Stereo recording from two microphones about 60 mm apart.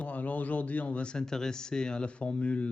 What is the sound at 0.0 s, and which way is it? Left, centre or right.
Speech, left.